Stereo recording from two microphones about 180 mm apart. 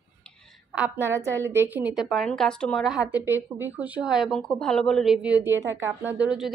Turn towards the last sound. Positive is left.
turn(degrees=-5)  # may be behind; listen again after turning